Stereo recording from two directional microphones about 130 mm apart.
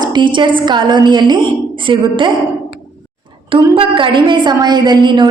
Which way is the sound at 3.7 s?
40° right (ahead or behind).